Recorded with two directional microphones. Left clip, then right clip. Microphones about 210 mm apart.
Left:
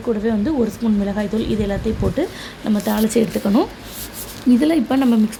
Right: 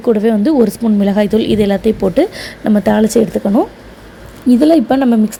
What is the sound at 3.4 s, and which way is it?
A woman's voice, 10° right (ahead or behind).